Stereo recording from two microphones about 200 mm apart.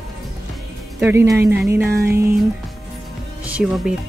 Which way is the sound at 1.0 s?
10° right (ahead or behind).